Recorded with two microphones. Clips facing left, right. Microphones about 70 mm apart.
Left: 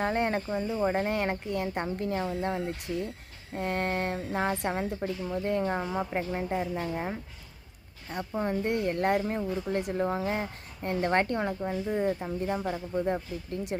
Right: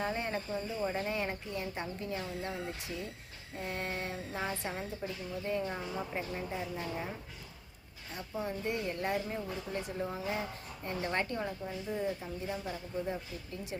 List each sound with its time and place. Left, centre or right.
0.0 s speech: left
3.5 s a woman's voice: left
8.3 s a woman's voice: left